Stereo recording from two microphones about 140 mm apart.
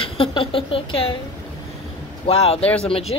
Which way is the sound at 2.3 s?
45° left (ahead or behind).